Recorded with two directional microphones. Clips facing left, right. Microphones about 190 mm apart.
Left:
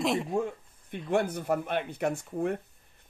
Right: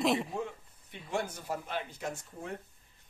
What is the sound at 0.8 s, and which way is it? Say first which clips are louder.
Speech: left 8 dB; 55° left (ahead or behind).